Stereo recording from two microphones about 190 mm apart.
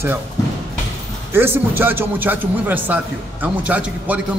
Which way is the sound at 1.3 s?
10° right (ahead or behind).